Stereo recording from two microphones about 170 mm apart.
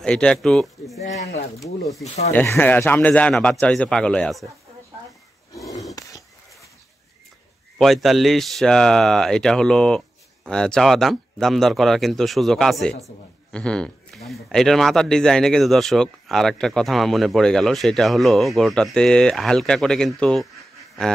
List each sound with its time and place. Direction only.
0.0 s speech: 5° left (ahead or behind)
2.3 s speech: 10° left (ahead or behind)
5.5 s a sound: 20° left (ahead or behind)
7.8 s speech: centre (ahead or behind)